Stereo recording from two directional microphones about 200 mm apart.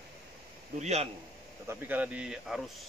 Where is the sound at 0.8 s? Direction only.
30° right (ahead or behind).